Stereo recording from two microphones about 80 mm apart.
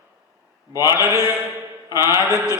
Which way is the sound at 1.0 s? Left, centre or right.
Right.